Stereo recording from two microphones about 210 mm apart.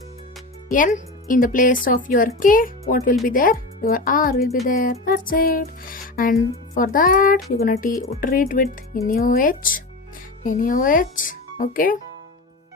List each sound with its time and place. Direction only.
0.7 s speech: 40° left (ahead or behind)
4.7 s music: 40° left (ahead or behind)
6.7 s speech: 40° left (ahead or behind)
7.5 s music: 45° left (ahead or behind)
8.1 s speech: 40° left (ahead or behind)